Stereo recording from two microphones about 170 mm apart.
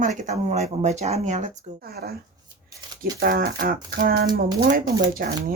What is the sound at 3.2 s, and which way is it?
Speech, 60° right (ahead or behind).